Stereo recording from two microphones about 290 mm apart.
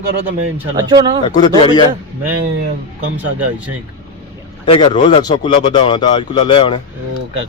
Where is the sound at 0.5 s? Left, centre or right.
Centre.